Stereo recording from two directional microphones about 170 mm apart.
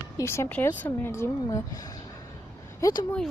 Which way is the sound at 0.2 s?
15° left (ahead or behind).